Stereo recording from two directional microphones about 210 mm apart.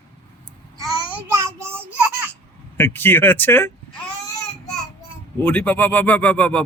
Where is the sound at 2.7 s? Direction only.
10° left (ahead or behind).